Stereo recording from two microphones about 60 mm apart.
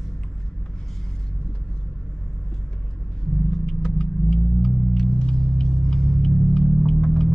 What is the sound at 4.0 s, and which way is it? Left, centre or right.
Rumble, centre.